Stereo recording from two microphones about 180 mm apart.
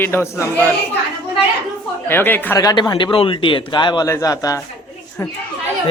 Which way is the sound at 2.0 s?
10° left (ahead or behind).